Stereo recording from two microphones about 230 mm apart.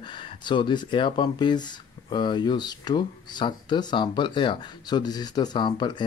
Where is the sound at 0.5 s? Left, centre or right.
Centre.